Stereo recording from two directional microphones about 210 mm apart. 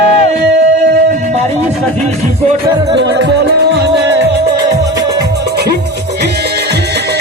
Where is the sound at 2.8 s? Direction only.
55° right (ahead or behind).